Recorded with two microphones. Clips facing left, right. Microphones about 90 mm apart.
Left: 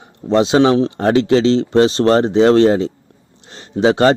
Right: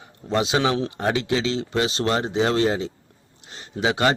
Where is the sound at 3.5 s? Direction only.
40° left (ahead or behind).